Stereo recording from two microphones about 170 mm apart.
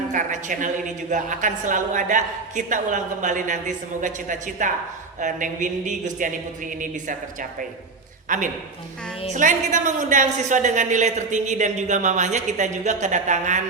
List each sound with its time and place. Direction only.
0.1 s a woman's voice: 50° right (ahead or behind)
8.3 s a woman's voice: 50° right (ahead or behind)